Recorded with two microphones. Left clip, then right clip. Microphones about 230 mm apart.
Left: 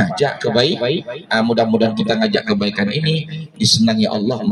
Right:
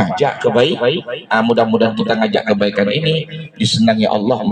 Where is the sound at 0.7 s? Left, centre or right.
Left.